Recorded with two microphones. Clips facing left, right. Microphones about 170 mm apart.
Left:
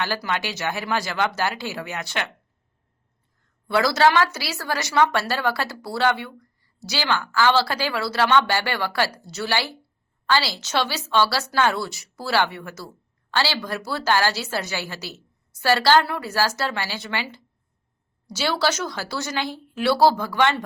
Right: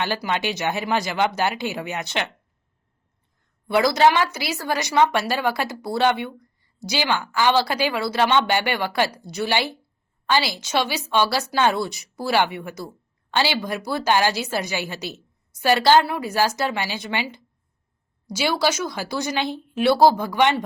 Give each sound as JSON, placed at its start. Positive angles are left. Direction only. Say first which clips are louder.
{"t": 0.0, "sound": "speech", "louder": "right 2 dB", "side_deg": -20}
{"t": 3.7, "sound": "speech", "louder": "right 1 dB", "side_deg": -15}